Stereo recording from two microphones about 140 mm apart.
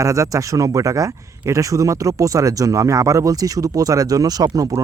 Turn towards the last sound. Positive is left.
turn(degrees=-25)  # may be behind; listen again after turning